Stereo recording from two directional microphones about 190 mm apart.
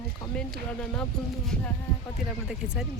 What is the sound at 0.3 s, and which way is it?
Speech, 5° left (ahead or behind).